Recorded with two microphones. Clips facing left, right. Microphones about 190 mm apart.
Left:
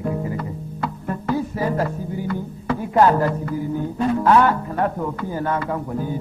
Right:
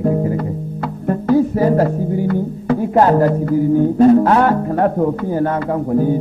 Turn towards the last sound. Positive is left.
turn(degrees=-45)  # may be behind; listen again after turning